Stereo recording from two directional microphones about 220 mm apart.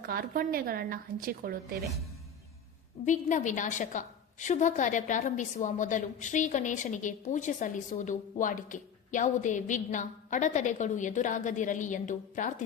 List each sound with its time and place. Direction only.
0.0 s speech: 40° right (ahead or behind)
3.1 s a woman's voice: 35° left (ahead or behind)